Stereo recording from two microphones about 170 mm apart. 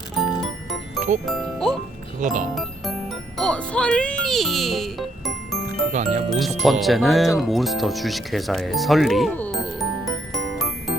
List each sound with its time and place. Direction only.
0.2 s music: centre (ahead or behind)
1.2 s speech: 5° left (ahead or behind)
2.2 s speech: 50° right (ahead or behind)
3.3 s speech: 5° left (ahead or behind)
5.9 s speech: 40° right (ahead or behind)
6.6 s speech: centre (ahead or behind)
10.3 s music: centre (ahead or behind)